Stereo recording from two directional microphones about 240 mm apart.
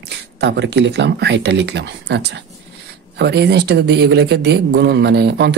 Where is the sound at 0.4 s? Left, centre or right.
Right.